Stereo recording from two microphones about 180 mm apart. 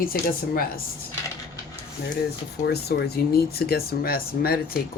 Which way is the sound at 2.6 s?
65° left (ahead or behind).